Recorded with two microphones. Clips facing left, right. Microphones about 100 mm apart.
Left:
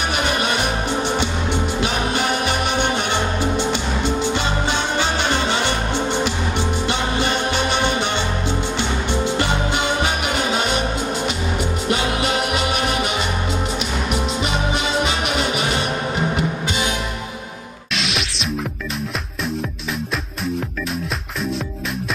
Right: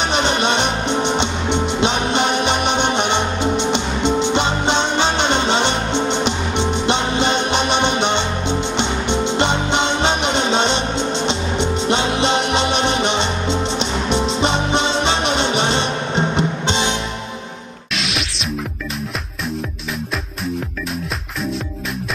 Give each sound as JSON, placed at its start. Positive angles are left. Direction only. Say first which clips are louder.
{"t": 0.1, "sound": "music", "louder": "right 4 dB", "side_deg": -25}
{"t": 17.9, "sound": "music", "louder": "even", "side_deg": 0}